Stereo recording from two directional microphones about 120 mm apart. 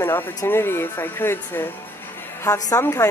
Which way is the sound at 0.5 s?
20° left (ahead or behind).